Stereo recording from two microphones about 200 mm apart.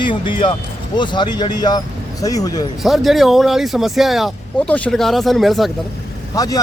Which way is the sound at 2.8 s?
Centre (ahead or behind).